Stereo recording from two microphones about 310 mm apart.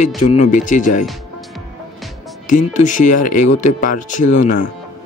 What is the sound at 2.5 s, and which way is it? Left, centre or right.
Speech, left.